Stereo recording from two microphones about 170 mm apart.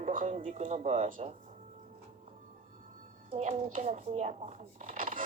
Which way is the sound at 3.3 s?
40° right (ahead or behind).